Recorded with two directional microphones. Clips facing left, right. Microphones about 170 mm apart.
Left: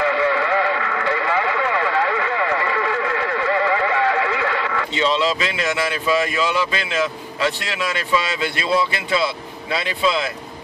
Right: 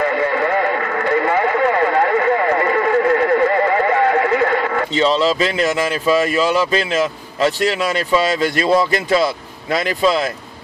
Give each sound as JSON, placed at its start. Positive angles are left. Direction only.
{"t": 0.0, "sound": "radio", "side_deg": -45}